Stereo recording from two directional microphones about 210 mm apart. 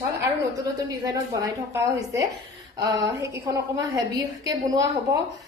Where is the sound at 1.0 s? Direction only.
15° right (ahead or behind).